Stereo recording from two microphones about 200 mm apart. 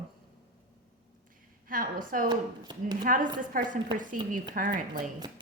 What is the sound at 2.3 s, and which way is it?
Speech, 20° right (ahead or behind).